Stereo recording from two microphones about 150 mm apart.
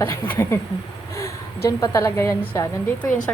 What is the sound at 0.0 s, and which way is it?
Speech, 20° left (ahead or behind).